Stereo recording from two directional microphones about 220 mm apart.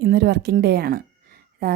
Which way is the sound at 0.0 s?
45° right (ahead or behind).